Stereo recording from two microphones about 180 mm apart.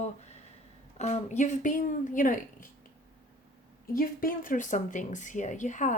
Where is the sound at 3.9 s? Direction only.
50° left (ahead or behind).